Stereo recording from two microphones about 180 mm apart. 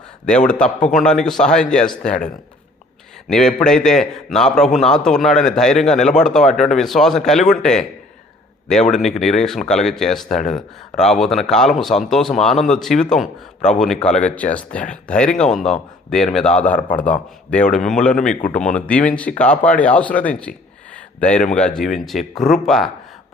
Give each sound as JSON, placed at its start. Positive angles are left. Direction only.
{"t": 0.3, "sound": "speech", "side_deg": 5}